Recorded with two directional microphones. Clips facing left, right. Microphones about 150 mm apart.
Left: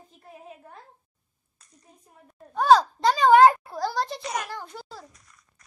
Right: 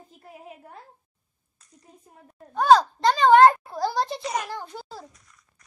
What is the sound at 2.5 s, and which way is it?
A child's voice, 5° left (ahead or behind).